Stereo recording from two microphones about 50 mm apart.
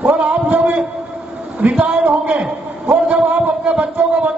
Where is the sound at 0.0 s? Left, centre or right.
Right.